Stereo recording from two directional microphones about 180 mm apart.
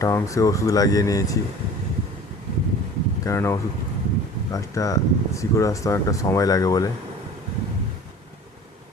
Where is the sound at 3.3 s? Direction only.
15° left (ahead or behind).